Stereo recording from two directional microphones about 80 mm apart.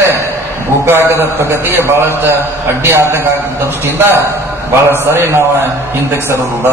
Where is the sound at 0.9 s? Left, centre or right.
Right.